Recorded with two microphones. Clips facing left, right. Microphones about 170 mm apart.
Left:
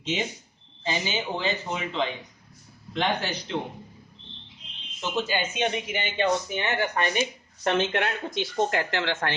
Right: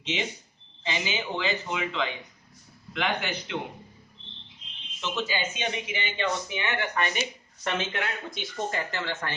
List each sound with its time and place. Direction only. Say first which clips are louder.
0.0 s speech: left 2 dB; 45° left (ahead or behind)
4.9 s speech: left 3 dB; 50° left (ahead or behind)
6.2 s speech: left 5 dB; 35° left (ahead or behind)
7.2 s speech: left 5 dB; 55° left (ahead or behind); by 9.3 s 85° left